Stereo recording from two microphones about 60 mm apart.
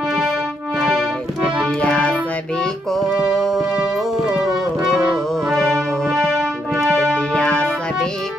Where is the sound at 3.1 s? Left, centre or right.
Centre.